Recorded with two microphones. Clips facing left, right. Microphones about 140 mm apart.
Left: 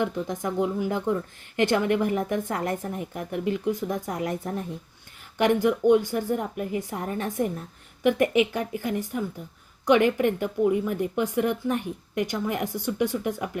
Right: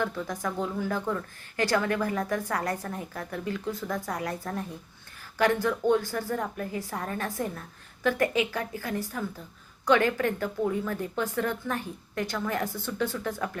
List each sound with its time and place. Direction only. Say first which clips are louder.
0.0 s speech: left 3 dB; 20° left (ahead or behind)